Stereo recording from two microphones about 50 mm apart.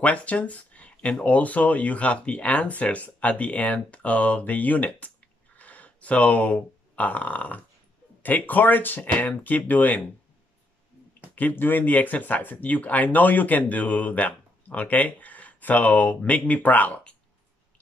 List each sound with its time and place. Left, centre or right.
0.0 s speech: left
11.3 s speech: left